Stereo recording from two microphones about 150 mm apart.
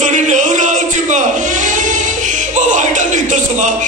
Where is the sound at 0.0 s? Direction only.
55° right (ahead or behind).